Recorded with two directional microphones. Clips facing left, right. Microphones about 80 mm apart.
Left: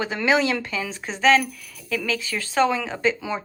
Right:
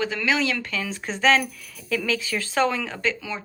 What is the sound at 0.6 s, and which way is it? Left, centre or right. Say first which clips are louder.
Speech: left 1 dB; centre.